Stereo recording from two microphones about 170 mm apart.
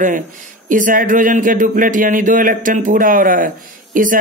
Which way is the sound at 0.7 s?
50° right (ahead or behind).